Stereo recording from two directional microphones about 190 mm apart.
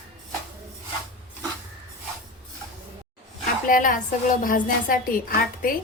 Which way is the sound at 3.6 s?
45° left (ahead or behind).